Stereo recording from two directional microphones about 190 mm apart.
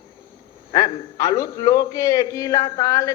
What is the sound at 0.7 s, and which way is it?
A man's voice, 20° left (ahead or behind).